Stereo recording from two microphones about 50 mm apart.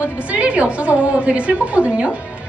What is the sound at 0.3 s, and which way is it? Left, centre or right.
A woman's voice, right.